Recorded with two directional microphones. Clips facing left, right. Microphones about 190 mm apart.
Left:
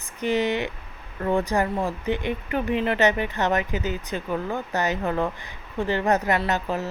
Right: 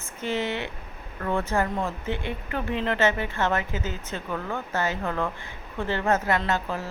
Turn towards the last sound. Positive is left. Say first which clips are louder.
# left 2 dB
turn(degrees=20)  # may be behind; listen again after turning